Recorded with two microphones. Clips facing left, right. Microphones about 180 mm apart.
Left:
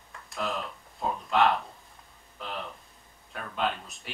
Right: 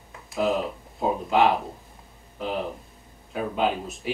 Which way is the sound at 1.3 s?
Centre (ahead or behind).